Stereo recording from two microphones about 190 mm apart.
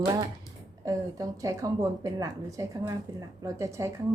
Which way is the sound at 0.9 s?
20° right (ahead or behind).